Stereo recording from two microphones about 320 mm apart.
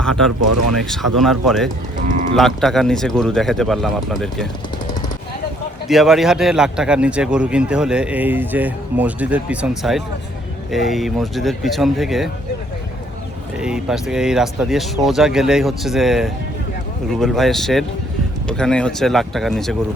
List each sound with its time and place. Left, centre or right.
0.0 s a man's voice: centre
2.0 s speech: right
2.3 s a man's voice: centre
5.9 s a man's voice: centre
13.6 s a man's voice: centre